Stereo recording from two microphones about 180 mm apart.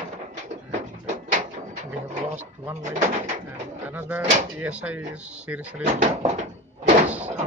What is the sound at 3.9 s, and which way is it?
Speech, 10° right (ahead or behind).